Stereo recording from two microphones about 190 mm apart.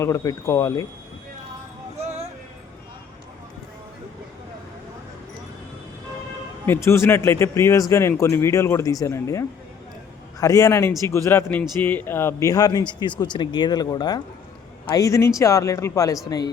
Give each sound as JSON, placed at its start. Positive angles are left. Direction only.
{"t": 0.0, "sound": "speech", "side_deg": 15}
{"t": 6.7, "sound": "speech", "side_deg": 15}